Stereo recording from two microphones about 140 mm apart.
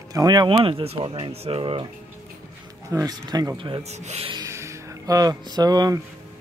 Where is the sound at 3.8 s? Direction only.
50° right (ahead or behind).